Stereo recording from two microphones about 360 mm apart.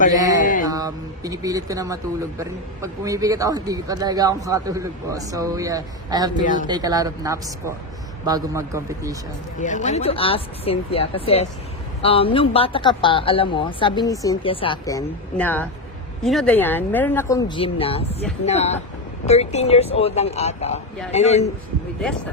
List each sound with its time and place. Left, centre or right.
0.1 s a man's voice: centre
6.4 s speech: left
6.7 s a man's voice: centre
9.6 s a woman's voice: left